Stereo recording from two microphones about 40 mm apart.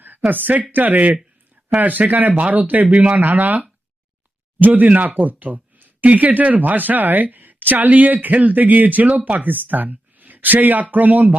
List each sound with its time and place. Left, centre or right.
0.3 s speech: right